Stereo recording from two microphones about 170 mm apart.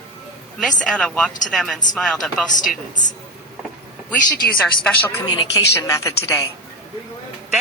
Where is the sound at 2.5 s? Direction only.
50° left (ahead or behind).